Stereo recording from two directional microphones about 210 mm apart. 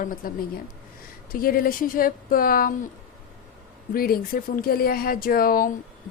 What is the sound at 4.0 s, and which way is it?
A woman's voice, 45° left (ahead or behind).